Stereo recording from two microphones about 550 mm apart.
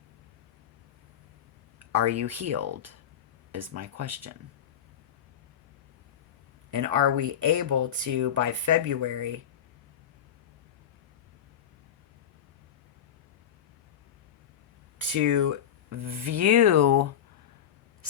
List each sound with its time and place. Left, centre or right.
1.9 s speech: right
6.7 s speech: right
14.9 s speech: right